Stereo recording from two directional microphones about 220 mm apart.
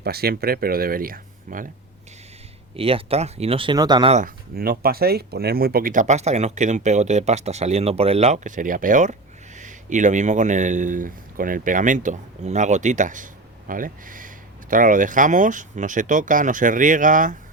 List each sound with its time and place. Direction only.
0.0 s a man's voice: 45° right (ahead or behind)
2.7 s speech: 25° right (ahead or behind)
4.5 s a man's voice: 40° right (ahead or behind)